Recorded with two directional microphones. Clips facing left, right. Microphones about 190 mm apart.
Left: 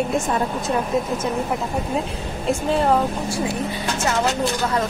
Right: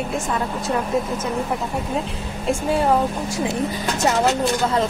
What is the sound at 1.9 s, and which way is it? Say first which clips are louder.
Speech: left 1 dB; centre (ahead or behind).